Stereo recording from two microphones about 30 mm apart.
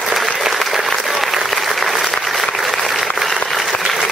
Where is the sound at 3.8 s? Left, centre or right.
Centre.